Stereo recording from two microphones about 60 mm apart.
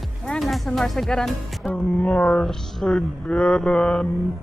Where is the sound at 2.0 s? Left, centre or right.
Left.